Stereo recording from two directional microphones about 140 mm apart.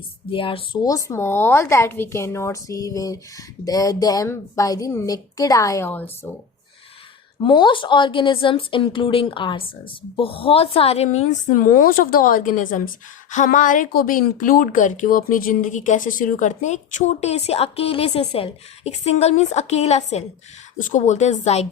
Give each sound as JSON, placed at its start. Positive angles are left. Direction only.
{"t": 0.3, "sound": "a woman's voice", "side_deg": 40}
{"t": 0.9, "sound": "a woman's voice", "side_deg": 25}
{"t": 6.2, "sound": "speech", "side_deg": 10}
{"t": 7.4, "sound": "a woman's voice", "side_deg": 35}
{"t": 20.7, "sound": "a woman's voice", "side_deg": 65}